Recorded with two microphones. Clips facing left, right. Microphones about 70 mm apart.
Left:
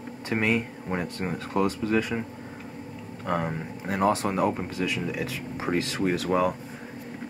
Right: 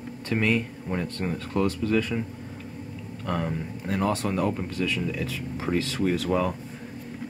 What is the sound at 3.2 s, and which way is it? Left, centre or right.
Speech, left.